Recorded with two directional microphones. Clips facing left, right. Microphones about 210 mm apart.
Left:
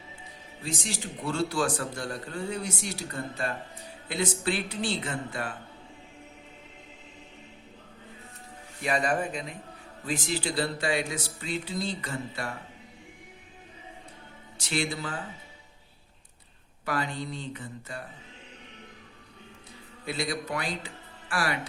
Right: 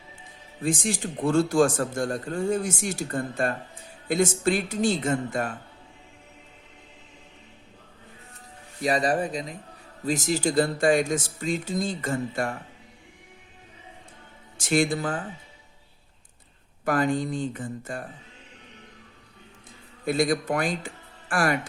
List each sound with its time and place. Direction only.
0.6 s a man's voice: 50° right (ahead or behind)
8.8 s a man's voice: 35° right (ahead or behind)
14.6 s a man's voice: 50° right (ahead or behind)
16.8 s a man's voice: 50° right (ahead or behind)
20.1 s speech: 50° right (ahead or behind)